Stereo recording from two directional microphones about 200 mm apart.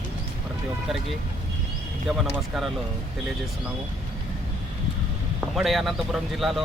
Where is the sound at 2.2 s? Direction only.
Centre (ahead or behind).